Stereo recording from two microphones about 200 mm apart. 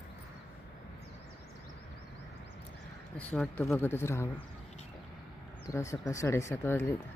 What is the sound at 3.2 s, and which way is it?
Speech, 5° left (ahead or behind).